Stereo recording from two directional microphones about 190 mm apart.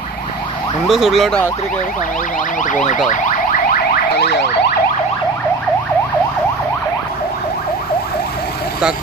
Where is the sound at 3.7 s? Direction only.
60° left (ahead or behind).